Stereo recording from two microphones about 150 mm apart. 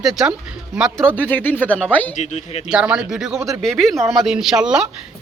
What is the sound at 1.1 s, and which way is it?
Speech, 10° left (ahead or behind).